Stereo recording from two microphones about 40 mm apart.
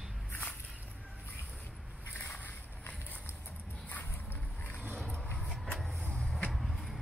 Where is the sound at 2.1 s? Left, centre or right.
Left.